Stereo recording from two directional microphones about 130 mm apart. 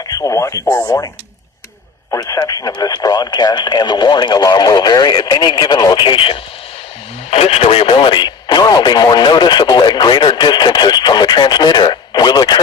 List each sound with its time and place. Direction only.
0.0 s speech: 30° left (ahead or behind)
2.0 s speech: 25° left (ahead or behind)